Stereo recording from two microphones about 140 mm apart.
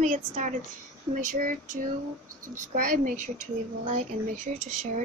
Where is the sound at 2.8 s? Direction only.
85° right.